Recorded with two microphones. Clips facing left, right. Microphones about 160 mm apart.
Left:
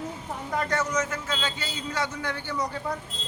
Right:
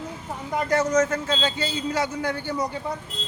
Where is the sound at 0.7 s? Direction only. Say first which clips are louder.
Right 11 dB; 40° right (ahead or behind).